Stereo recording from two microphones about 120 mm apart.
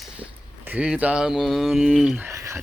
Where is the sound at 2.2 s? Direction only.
25° right (ahead or behind).